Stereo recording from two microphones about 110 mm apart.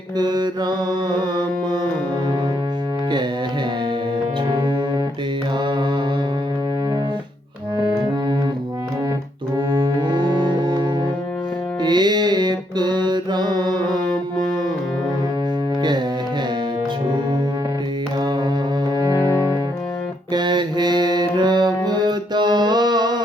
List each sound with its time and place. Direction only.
0.2 s music: 40° right (ahead or behind)
10.1 s music: 45° right (ahead or behind)
20.3 s mantra: 45° right (ahead or behind)
21.8 s music: 40° right (ahead or behind)